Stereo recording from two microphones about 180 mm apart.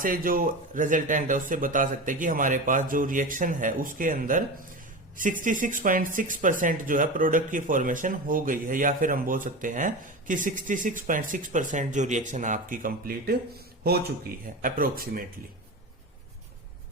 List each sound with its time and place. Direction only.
0.0 s speech: 50° right (ahead or behind)